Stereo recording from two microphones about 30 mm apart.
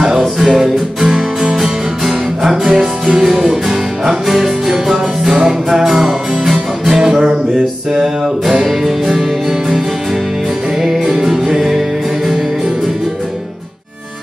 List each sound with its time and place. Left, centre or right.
0.4 s music: centre
1.6 s music: centre
8.6 s music: centre
11.1 s music: centre